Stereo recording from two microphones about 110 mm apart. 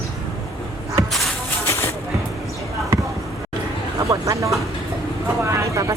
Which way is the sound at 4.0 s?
30° right (ahead or behind).